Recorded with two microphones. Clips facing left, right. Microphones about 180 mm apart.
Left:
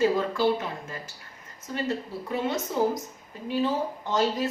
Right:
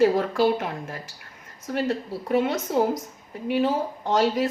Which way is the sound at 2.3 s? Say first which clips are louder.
Right 6 dB; 65° right (ahead or behind).